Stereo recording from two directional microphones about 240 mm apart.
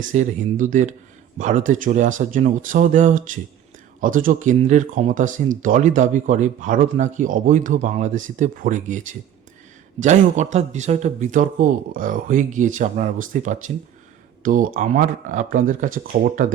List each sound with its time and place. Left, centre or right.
0.1 s a man's voice: right